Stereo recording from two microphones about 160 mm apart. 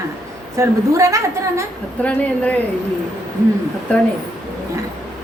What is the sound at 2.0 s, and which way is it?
Speech, 10° left (ahead or behind).